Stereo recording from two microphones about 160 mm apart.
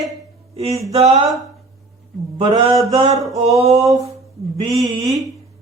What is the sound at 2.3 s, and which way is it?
Speech, 30° right (ahead or behind).